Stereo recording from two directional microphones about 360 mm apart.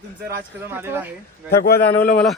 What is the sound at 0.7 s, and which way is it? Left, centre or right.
Speech, centre.